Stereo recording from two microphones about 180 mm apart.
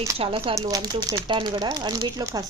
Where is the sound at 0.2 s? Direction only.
30° right (ahead or behind).